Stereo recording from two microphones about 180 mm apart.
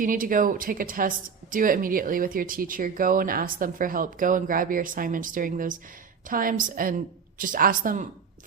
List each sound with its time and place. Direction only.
0.0 s a woman's voice: 50° right (ahead or behind)